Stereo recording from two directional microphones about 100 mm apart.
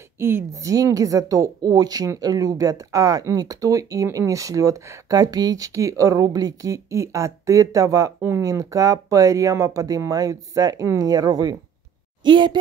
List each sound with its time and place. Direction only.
0.2 s a woman's voice: 25° right (ahead or behind); by 11.5 s 40° right (ahead or behind)
12.2 s speech: 50° right (ahead or behind)